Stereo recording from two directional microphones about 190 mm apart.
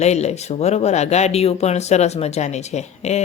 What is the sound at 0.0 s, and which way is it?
A man's voice, 35° left (ahead or behind).